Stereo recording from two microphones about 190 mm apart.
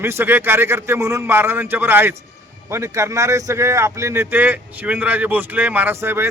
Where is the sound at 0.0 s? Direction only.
10° right (ahead or behind).